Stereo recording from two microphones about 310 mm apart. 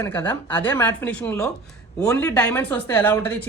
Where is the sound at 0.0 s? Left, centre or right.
Centre.